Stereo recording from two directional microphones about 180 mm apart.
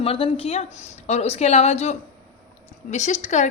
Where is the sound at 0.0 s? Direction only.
30° left (ahead or behind).